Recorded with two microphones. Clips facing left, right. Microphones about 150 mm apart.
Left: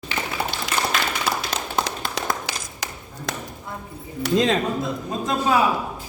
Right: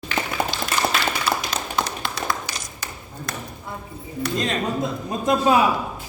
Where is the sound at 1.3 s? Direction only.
45° left (ahead or behind).